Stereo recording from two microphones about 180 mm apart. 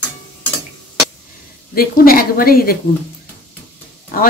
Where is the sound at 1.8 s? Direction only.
55° left (ahead or behind).